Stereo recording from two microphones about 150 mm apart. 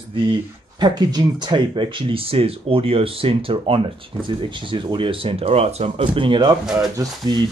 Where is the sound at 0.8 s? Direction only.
25° right (ahead or behind).